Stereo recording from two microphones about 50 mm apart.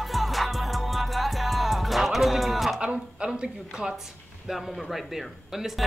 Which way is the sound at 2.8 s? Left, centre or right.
Centre.